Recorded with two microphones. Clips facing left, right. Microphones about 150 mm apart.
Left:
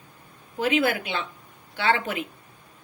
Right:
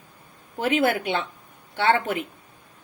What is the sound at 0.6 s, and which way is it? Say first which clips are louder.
Speech: right 1 dB; 45° right (ahead or behind).